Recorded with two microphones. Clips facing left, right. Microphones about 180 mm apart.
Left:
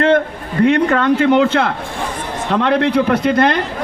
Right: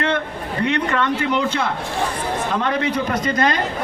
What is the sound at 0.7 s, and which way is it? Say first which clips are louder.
Speech: left 6 dB; 55° left (ahead or behind).